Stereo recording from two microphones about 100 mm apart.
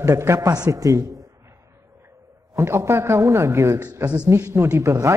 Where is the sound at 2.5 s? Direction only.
25° right (ahead or behind).